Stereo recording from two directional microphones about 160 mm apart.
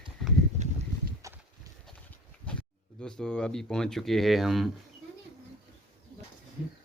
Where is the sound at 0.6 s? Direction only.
45° right (ahead or behind).